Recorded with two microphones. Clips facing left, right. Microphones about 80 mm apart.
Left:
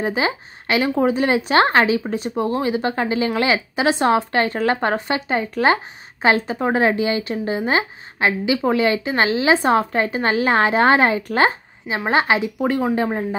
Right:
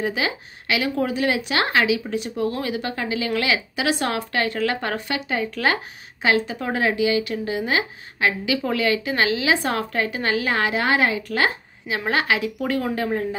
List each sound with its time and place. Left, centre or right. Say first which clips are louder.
0.0 s a woman's voice: left 3 dB; left